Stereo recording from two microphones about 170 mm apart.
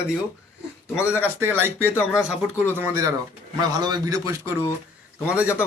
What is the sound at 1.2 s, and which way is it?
A man's voice, 15° right (ahead or behind).